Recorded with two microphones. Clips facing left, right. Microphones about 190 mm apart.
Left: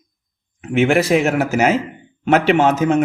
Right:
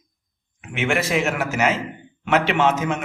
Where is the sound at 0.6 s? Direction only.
35° left (ahead or behind).